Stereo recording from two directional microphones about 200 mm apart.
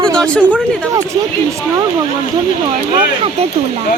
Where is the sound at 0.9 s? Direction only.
15° right (ahead or behind).